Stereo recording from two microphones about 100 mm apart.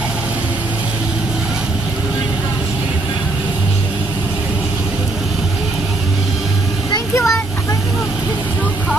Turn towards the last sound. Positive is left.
turn(degrees=30)  # may be behind; listen again after turning